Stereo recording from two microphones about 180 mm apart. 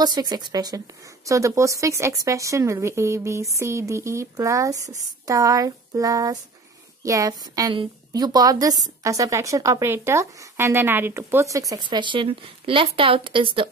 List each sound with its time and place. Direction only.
0.0 s a woman's voice: 20° right (ahead or behind)